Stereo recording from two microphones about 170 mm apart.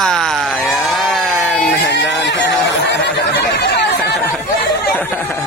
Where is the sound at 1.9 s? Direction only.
90° left.